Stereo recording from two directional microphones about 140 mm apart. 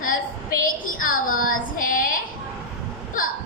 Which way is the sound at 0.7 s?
85° left.